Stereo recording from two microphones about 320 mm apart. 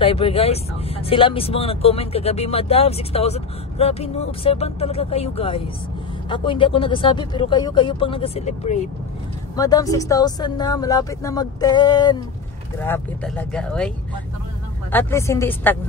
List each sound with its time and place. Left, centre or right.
0.0 s speech: centre
9.6 s speech: centre